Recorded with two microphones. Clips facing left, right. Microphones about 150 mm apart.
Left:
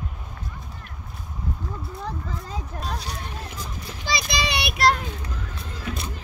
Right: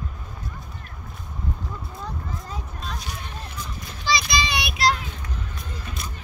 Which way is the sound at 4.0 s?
55° left (ahead or behind).